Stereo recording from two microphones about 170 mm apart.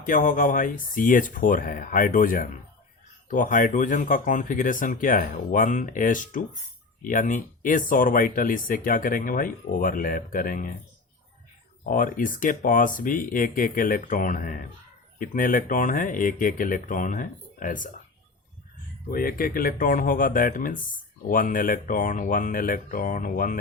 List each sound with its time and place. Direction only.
0.0 s speech: 55° left (ahead or behind)
11.9 s speech: 55° left (ahead or behind)
19.1 s speech: 60° left (ahead or behind)